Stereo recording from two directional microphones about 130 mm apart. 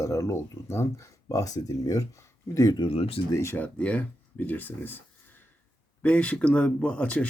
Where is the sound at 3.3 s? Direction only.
20° left (ahead or behind).